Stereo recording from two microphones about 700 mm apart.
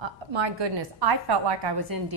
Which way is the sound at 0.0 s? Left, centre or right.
Right.